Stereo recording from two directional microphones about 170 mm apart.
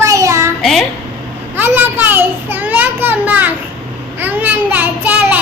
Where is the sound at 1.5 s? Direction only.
10° right (ahead or behind).